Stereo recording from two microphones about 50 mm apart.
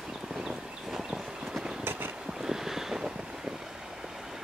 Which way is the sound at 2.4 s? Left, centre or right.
Centre.